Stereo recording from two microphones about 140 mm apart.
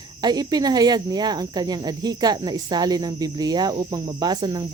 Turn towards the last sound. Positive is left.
turn(degrees=-30)  # may be behind; listen again after turning